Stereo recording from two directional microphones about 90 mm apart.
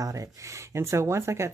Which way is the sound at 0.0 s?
40° right (ahead or behind).